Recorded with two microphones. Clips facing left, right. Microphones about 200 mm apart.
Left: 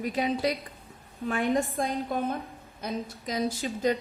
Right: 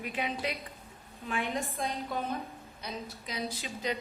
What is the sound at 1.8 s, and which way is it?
A woman's voice, 50° left (ahead or behind).